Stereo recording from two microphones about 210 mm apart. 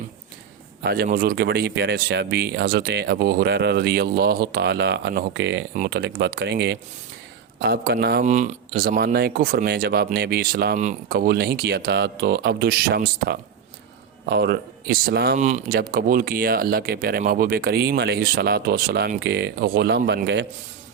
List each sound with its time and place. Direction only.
0.8 s speech: 45° right (ahead or behind)
8.2 s speech: 35° right (ahead or behind)
15.4 s speech: 35° right (ahead or behind); by 20.5 s 55° right (ahead or behind)